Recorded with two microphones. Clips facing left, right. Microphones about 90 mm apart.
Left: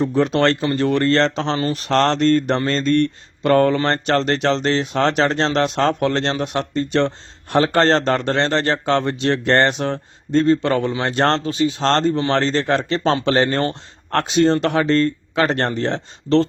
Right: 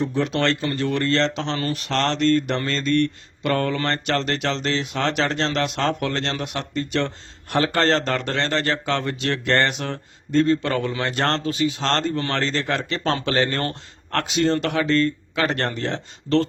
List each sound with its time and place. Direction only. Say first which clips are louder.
0.0 s a man's voice: left 5 dB; 40° left (ahead or behind)